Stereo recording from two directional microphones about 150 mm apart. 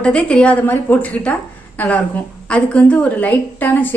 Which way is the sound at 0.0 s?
5° left (ahead or behind).